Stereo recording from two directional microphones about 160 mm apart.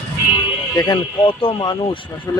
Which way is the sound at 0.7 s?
25° left (ahead or behind).